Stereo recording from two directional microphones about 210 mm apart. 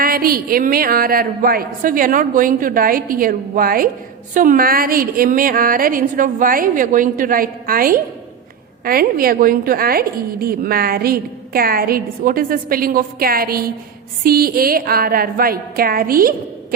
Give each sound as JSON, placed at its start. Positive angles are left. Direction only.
{"t": 0.0, "sound": "a woman's voice", "side_deg": -45}